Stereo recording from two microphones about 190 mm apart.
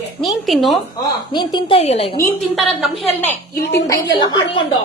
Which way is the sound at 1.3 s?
25° left (ahead or behind).